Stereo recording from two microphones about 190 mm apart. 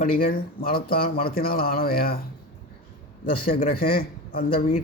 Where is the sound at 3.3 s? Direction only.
50° left (ahead or behind).